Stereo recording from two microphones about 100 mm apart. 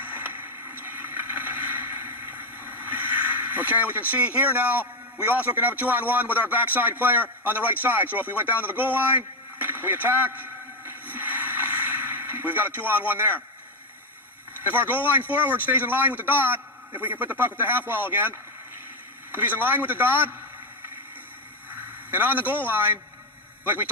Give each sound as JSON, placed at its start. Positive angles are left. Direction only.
{"t": 0.0, "sound": "vehicle", "side_deg": -20}
{"t": 8.4, "sound": "a sound", "side_deg": -20}
{"t": 14.6, "sound": "a man's voice", "side_deg": -20}
{"t": 22.1, "sound": "a man's voice", "side_deg": -20}